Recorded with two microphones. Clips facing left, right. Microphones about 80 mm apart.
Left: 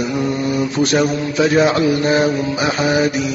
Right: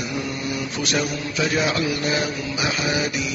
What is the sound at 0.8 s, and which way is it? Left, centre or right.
Mantra, left.